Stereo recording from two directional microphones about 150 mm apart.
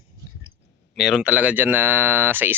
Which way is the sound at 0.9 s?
Centre (ahead or behind).